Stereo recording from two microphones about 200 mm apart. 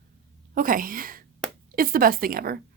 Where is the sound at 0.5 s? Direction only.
45° right (ahead or behind).